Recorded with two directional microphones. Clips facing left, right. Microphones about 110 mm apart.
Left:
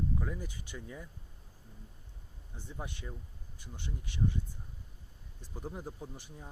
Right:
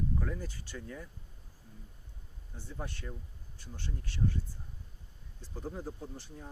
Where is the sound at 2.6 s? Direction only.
15° left (ahead or behind).